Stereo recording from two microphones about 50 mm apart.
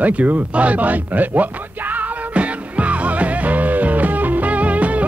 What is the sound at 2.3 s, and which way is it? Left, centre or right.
Music, right.